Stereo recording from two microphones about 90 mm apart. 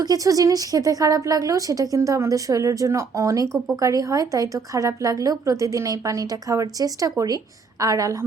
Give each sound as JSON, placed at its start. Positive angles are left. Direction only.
{"t": 0.0, "sound": "a woman's voice", "side_deg": -45}